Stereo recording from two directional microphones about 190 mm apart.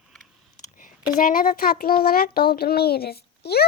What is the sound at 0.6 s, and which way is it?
A child's voice, 45° left (ahead or behind).